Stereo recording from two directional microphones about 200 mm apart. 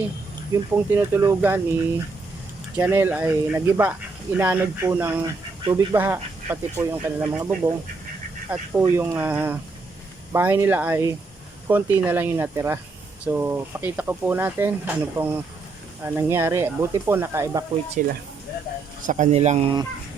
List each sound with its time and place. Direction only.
0.5 s speech: 15° right (ahead or behind)
2.7 s speech: 10° right (ahead or behind)
18.0 s speech: 40° right (ahead or behind)